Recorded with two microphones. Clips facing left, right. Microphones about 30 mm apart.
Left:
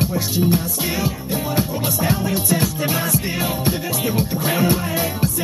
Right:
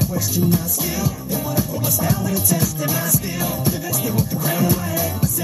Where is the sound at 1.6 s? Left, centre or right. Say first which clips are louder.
Left 2 dB; left.